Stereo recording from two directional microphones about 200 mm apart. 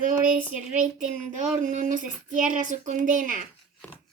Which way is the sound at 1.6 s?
40° right (ahead or behind).